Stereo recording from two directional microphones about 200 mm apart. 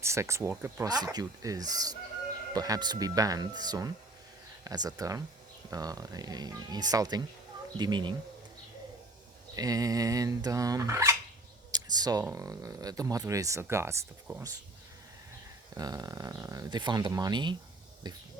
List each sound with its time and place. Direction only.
0.0 s speech: 15° right (ahead or behind)
9.6 s speech: 20° right (ahead or behind)
11.7 s a sound: 20° right (ahead or behind)
12.2 s speech: 15° right (ahead or behind)
15.7 s speech: 20° right (ahead or behind)